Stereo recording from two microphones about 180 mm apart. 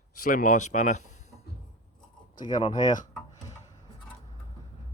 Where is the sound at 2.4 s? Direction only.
25° left (ahead or behind).